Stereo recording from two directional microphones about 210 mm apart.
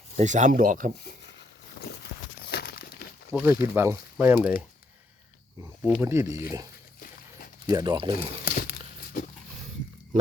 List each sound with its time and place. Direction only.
0.2 s speech: 35° right (ahead or behind)
2.4 s crumpling: 50° left (ahead or behind)
3.3 s speech: 10° right (ahead or behind)
5.8 s speech: 10° right (ahead or behind)
7.7 s speech: 20° right (ahead or behind)
8.4 s a sound: 45° left (ahead or behind)